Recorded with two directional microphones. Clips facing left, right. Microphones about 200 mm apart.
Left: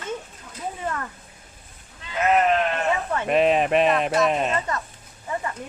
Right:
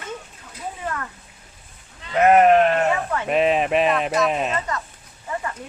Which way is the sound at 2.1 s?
60° right (ahead or behind).